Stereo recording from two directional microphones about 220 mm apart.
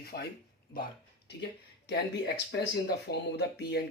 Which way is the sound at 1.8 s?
50° left (ahead or behind).